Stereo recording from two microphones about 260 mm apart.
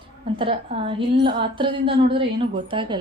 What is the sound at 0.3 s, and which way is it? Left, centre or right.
A woman's voice, right.